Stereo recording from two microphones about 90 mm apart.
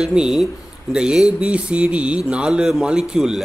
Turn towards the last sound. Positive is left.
turn(degrees=-5)  # may be behind; listen again after turning